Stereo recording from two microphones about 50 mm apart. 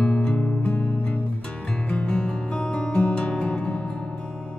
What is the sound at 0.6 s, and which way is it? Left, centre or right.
Music, left.